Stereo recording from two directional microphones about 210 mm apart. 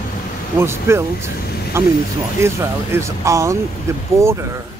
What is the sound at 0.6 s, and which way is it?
Speech, 10° right (ahead or behind).